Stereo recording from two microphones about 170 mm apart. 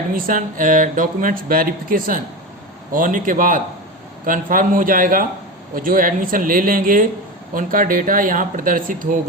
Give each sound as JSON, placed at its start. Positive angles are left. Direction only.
{"t": 0.1, "sound": "speech", "side_deg": -55}